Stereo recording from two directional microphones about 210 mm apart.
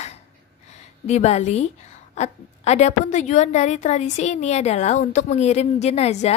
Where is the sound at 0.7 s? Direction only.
30° left (ahead or behind).